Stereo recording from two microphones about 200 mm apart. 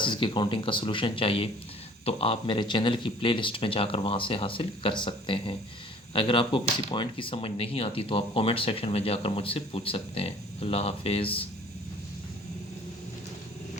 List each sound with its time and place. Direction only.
0.0 s speech: 25° left (ahead or behind)